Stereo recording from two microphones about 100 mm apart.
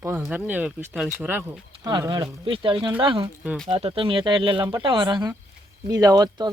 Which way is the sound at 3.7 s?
75° right (ahead or behind).